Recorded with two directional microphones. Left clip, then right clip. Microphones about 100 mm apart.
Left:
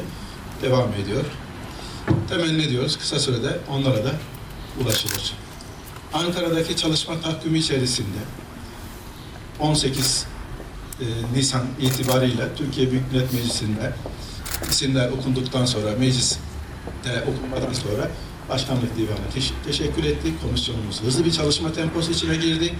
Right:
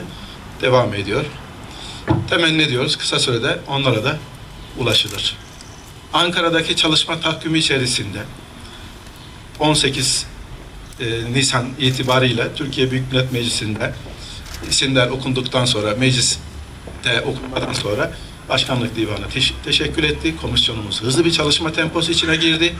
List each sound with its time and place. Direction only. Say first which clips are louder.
0.6 s a man's voice: right 6 dB; 25° right (ahead or behind)
9.6 s a man's voice: right 6 dB; 20° right (ahead or behind)
11.3 s a man's voice: right 6 dB; 20° right (ahead or behind)